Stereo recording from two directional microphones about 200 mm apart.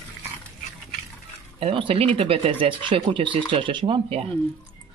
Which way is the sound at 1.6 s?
25° right (ahead or behind).